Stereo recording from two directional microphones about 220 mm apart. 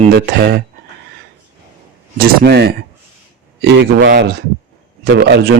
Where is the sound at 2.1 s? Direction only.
45° right (ahead or behind).